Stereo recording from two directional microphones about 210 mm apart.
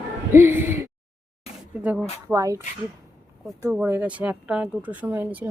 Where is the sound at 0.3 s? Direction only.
10° right (ahead or behind).